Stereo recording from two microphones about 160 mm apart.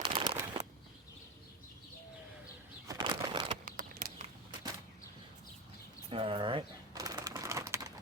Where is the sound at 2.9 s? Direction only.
30° right (ahead or behind).